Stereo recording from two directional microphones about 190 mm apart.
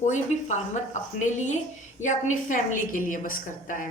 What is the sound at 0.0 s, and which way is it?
A woman's voice, 35° left (ahead or behind).